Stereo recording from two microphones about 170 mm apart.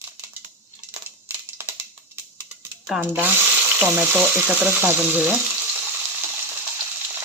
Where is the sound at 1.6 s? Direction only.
15° right (ahead or behind).